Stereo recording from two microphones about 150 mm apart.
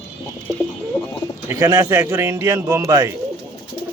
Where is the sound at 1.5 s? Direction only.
15° right (ahead or behind).